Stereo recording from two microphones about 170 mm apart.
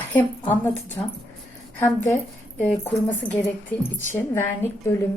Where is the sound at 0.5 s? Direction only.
15° left (ahead or behind).